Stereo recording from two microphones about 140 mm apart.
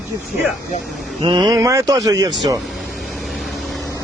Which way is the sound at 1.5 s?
25° right (ahead or behind).